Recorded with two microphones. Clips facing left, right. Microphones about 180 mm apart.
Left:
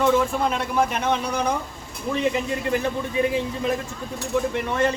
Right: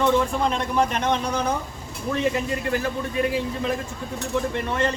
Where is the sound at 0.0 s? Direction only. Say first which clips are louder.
Left 1 dB; 5° left (ahead or behind).